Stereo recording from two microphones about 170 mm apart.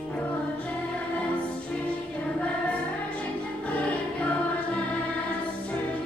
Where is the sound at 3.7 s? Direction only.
10° left (ahead or behind).